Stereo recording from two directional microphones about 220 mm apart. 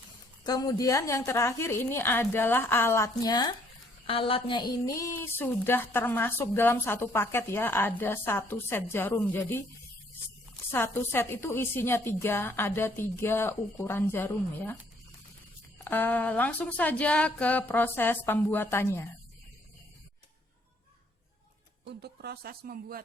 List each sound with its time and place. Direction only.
0.4 s a woman's voice: 15° left (ahead or behind)
10.7 s a woman's voice: 10° left (ahead or behind)
15.8 s a woman's voice: 10° left (ahead or behind)
22.0 s speech: 45° right (ahead or behind)